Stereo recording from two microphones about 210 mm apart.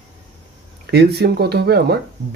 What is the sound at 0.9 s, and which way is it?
Speech, 50° right (ahead or behind).